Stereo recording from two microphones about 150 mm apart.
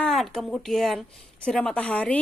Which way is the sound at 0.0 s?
5° left (ahead or behind).